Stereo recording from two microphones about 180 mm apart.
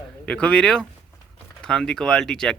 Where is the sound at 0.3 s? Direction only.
5° left (ahead or behind).